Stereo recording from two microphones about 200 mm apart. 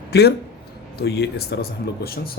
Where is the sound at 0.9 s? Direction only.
55° left (ahead or behind).